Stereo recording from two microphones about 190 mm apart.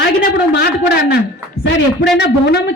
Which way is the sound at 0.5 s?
60° left (ahead or behind).